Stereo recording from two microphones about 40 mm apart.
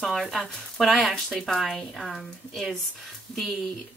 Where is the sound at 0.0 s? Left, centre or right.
Centre.